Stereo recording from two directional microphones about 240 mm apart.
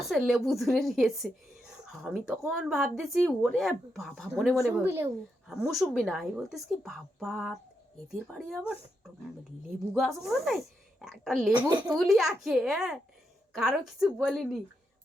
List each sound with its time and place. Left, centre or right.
0.0 s speech: centre
9.9 s speech: centre
11.7 s speech: centre
11.9 s speech: centre